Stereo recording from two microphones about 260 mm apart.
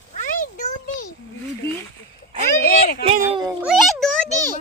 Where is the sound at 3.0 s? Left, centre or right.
Right.